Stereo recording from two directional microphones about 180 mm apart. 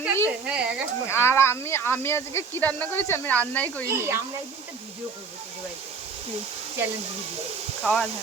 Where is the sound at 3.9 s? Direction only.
15° right (ahead or behind).